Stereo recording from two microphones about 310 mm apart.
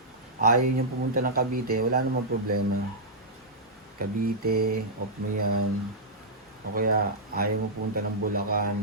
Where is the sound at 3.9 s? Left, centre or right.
Right.